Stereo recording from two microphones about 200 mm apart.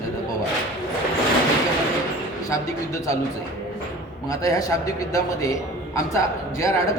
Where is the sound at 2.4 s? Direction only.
15° left (ahead or behind).